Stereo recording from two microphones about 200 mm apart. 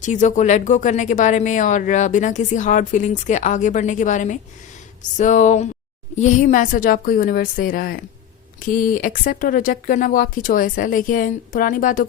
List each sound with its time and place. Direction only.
0.0 s speech: 40° left (ahead or behind)